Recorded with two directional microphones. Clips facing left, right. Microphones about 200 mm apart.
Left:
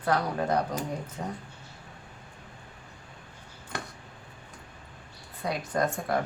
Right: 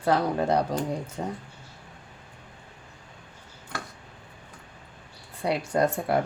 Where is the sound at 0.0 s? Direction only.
30° right (ahead or behind).